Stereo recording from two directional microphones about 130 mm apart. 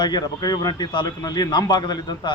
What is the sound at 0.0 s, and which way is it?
A man's voice, 30° left (ahead or behind).